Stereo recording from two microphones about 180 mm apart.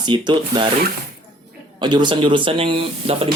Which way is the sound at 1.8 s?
25° right (ahead or behind).